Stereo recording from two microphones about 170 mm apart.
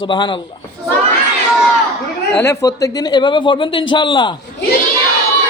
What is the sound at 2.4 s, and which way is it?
A man's voice, 15° left (ahead or behind).